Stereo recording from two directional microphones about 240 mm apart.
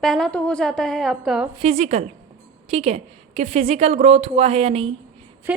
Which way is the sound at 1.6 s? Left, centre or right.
Right.